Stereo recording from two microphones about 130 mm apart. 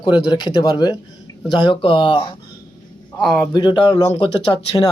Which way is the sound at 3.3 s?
25° left (ahead or behind).